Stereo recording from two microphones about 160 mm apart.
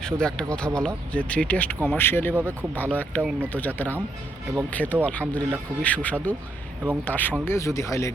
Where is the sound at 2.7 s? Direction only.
10° left (ahead or behind).